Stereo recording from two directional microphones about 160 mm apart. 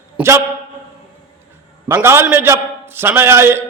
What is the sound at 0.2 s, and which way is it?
Speech, 10° right (ahead or behind).